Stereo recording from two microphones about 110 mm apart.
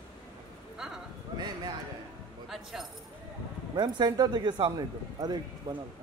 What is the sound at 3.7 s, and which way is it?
Speech, 40° right (ahead or behind).